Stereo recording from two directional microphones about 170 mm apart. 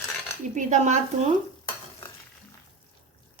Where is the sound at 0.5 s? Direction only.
45° right (ahead or behind).